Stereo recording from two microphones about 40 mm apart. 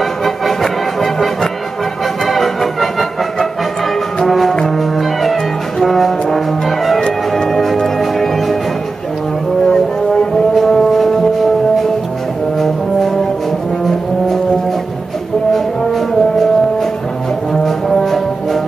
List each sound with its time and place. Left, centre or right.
0.2 s music: centre
4.3 s brass instrument: centre
7.0 s music: left
7.4 s music: centre
9.7 s music: centre
12.5 s brass instrument: centre
15.5 s brass instrument: centre
17.6 s brass instrument: centre